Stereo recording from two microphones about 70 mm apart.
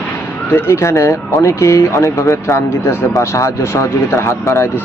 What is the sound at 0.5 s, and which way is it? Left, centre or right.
Speech, left.